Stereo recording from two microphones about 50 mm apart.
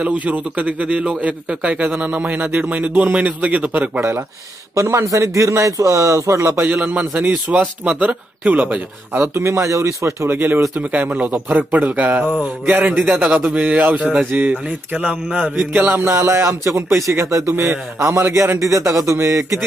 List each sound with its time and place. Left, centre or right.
0.0 s a man's voice: right
4.8 s a man's voice: right
6.6 s a man's voice: right
9.3 s speech: right
10.3 s music: right
11.0 s a man's voice: right
15.7 s music: right
16.1 s a man's voice: right
17.5 s a man's voice: right